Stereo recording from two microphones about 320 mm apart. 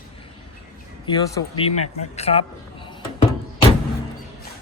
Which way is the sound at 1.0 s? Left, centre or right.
Centre.